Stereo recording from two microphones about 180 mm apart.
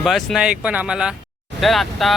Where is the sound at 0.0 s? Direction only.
Centre (ahead or behind).